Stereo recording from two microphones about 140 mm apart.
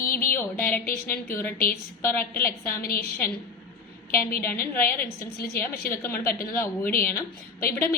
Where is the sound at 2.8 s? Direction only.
90° left.